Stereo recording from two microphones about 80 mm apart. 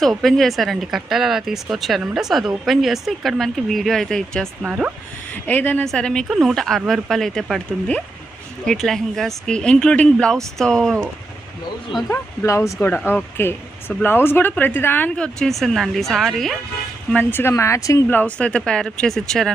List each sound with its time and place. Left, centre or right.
0.0 s a woman's voice: centre
4.6 s speech: centre
5.3 s speech: left
5.8 s speech: centre
6.2 s a woman's voice: centre
8.6 s a woman's voice: centre
12.0 s speech: left
12.5 s speech: left
13.3 s speech: left
15.1 s a woman's voice: centre
17.2 s speech: left
17.5 s speech: left
18.1 s speech: centre